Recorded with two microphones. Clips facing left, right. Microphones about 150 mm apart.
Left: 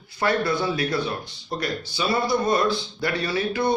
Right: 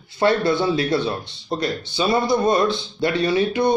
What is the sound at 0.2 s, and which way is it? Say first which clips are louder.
Speech: right 5 dB; 25° right (ahead or behind).